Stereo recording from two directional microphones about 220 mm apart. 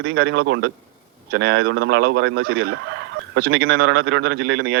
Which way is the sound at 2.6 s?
55° right (ahead or behind).